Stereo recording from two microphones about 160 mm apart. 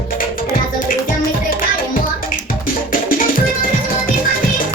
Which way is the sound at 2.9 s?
60° left (ahead or behind).